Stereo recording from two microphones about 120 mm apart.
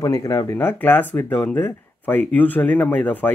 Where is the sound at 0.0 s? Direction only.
30° left (ahead or behind).